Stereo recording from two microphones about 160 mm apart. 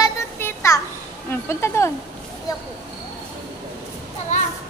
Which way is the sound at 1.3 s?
15° left (ahead or behind).